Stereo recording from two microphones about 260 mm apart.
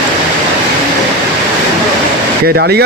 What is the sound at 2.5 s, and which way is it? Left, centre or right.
Speech, right.